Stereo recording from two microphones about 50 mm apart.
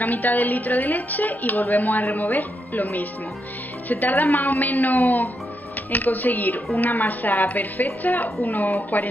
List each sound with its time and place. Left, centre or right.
0.0 s a woman's voice: left